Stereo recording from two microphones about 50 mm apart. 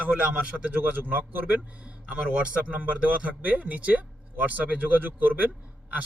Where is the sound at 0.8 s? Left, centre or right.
Right.